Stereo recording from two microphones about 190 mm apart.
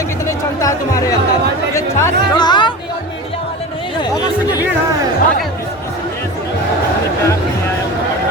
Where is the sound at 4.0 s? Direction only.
20° left (ahead or behind).